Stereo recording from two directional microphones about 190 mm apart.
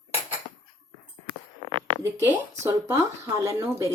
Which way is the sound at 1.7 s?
25° right (ahead or behind).